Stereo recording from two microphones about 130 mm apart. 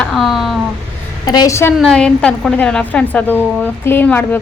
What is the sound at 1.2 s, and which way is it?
Speech, 30° left (ahead or behind).